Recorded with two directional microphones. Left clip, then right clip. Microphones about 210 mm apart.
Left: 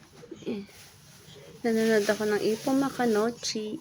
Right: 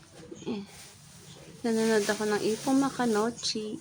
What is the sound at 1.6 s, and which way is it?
Speech, 5° left (ahead or behind).